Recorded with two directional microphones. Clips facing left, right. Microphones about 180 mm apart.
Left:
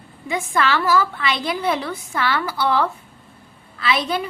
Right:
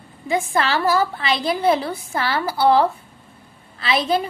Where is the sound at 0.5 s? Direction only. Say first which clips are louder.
Left 1 dB; 35° right (ahead or behind).